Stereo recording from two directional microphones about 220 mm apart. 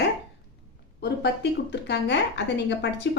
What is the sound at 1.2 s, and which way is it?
Speech, 50° left (ahead or behind).